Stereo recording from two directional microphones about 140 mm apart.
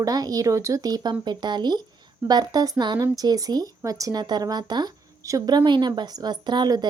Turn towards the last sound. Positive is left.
turn(degrees=-30)  # may be behind; listen again after turning